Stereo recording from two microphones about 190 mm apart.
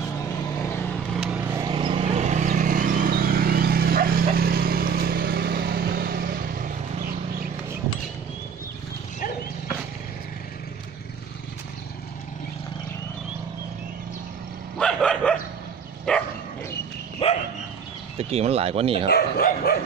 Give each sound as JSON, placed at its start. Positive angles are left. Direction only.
{"t": 0.6, "sound": "vehicle", "side_deg": 10}
{"t": 1.1, "sound": "vehicle", "side_deg": -5}
{"t": 1.5, "sound": "vehicle", "side_deg": -20}
{"t": 14.8, "sound": "dog", "side_deg": 5}
{"t": 17.2, "sound": "dog", "side_deg": 30}
{"t": 18.1, "sound": "speech", "side_deg": -35}
{"t": 19.0, "sound": "speech", "side_deg": 55}